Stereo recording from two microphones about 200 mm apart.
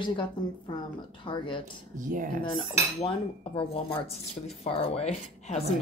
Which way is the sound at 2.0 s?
40° right (ahead or behind).